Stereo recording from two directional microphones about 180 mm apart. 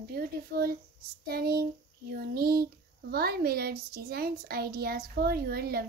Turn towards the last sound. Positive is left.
turn(degrees=-60)  # may be behind; listen again after turning